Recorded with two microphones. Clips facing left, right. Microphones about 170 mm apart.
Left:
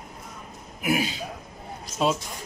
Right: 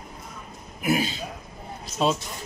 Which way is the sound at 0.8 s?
10° left (ahead or behind).